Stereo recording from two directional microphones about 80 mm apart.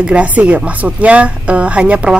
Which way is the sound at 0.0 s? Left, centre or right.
Centre.